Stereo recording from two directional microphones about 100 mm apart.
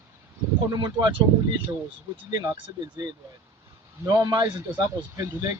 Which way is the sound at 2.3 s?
40° right (ahead or behind).